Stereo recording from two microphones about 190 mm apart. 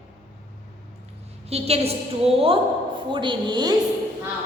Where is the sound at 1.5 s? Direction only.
35° right (ahead or behind).